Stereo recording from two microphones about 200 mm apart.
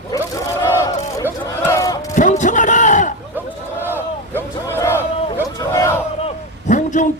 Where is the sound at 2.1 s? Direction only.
40° left (ahead or behind).